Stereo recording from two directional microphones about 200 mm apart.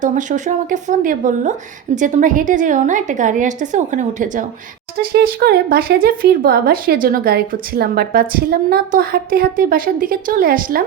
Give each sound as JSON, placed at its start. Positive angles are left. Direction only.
{"t": 0.0, "sound": "a woman's voice", "side_deg": -40}
{"t": 5.1, "sound": "speech", "side_deg": -50}